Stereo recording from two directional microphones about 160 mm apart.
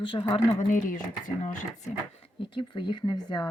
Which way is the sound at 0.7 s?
55° left (ahead or behind).